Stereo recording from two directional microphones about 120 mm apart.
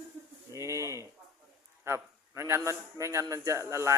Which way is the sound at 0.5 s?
25° right (ahead or behind).